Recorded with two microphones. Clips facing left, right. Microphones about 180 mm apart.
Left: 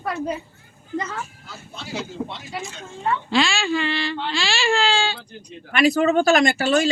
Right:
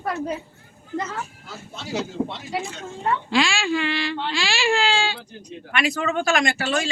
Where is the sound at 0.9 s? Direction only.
5° right (ahead or behind).